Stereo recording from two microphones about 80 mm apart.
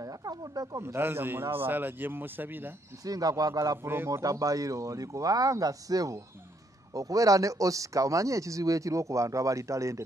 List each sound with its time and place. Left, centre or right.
0.0 s a sound: right
0.7 s a man's voice: right
3.1 s speech: right
3.8 s a man's voice: right
4.1 s speech: right